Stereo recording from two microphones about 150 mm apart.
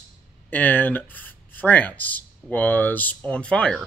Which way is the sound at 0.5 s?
10° left (ahead or behind).